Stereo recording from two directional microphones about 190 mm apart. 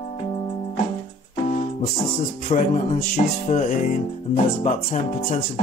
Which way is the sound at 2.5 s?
35° left (ahead or behind).